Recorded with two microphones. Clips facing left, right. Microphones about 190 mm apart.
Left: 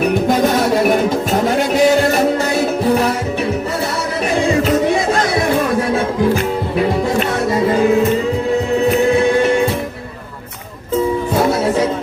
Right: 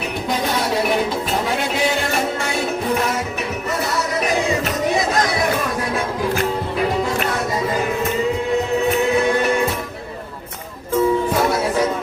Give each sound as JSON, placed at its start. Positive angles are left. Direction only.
{"t": 0.0, "sound": "music", "side_deg": 50}
{"t": 1.5, "sound": "music", "side_deg": 40}